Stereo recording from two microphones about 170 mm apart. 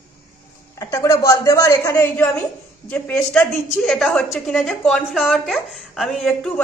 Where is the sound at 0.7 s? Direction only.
20° left (ahead or behind).